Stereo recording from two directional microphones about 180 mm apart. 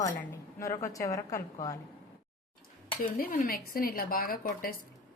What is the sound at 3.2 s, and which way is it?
A woman's voice, 55° left (ahead or behind).